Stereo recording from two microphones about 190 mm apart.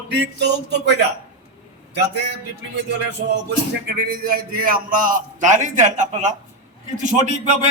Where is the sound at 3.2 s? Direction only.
60° right (ahead or behind); by 7.2 s 40° right (ahead or behind).